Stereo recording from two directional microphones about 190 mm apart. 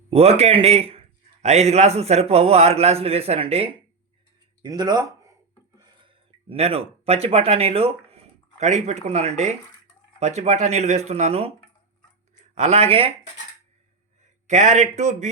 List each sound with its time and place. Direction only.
0.1 s speech: 35° right (ahead or behind)
4.6 s a sound: 20° right (ahead or behind)
8.5 s speech: 35° right (ahead or behind)
12.5 s speech: 35° right (ahead or behind)
14.4 s speech: 35° right (ahead or behind)